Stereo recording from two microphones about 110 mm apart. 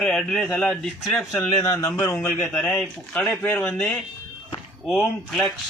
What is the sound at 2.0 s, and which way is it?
Speech, 20° left (ahead or behind).